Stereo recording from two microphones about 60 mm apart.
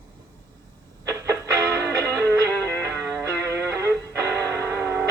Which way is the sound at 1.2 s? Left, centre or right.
Right.